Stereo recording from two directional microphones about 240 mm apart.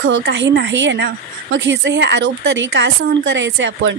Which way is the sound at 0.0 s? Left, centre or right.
Right.